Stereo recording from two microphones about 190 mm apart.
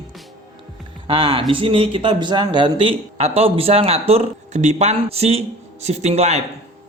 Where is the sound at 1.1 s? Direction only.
25° right (ahead or behind).